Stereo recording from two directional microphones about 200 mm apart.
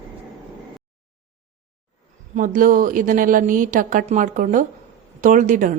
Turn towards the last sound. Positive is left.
turn(degrees=-40)  # may be behind; listen again after turning